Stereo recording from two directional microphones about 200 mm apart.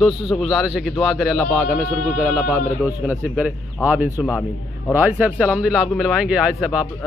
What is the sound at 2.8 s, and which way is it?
A man's voice, 5° right (ahead or behind).